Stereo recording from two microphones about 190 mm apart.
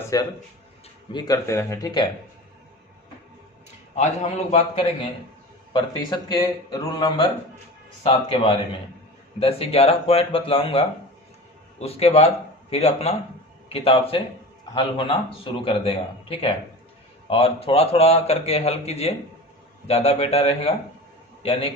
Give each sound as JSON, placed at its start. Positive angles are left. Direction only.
{"t": 0.1, "sound": "speech", "side_deg": 20}
{"t": 3.9, "sound": "a man's voice", "side_deg": 35}
{"t": 5.7, "sound": "a man's voice", "side_deg": 25}